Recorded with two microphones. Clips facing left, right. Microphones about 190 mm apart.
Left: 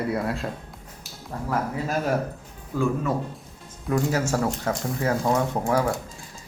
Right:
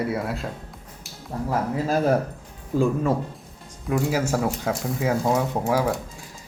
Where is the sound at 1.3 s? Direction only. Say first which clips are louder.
Right 4 dB; 20° right (ahead or behind).